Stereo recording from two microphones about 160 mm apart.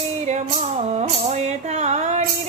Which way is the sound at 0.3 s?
45° right (ahead or behind).